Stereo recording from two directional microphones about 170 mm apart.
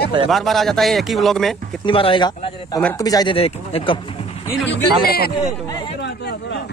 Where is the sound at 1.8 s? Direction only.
30° left (ahead or behind).